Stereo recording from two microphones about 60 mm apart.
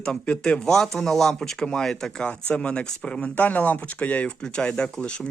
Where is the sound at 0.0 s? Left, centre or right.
Centre.